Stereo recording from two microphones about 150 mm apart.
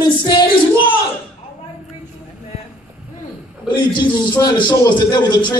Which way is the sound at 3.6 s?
30° left (ahead or behind).